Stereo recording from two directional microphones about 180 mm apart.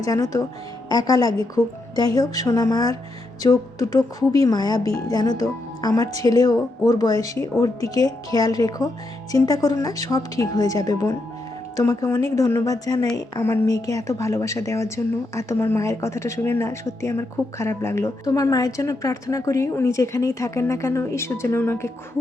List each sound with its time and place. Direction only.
0.0 s a woman's voice: 20° left (ahead or behind)